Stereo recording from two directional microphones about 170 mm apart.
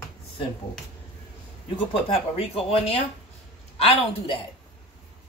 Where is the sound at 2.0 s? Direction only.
35° left (ahead or behind).